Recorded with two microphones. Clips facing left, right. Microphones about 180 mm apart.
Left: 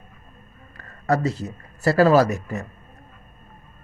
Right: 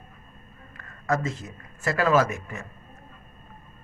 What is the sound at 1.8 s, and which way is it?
Speech, 35° left (ahead or behind).